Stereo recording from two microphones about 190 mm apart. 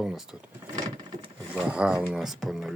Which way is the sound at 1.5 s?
5° right (ahead or behind).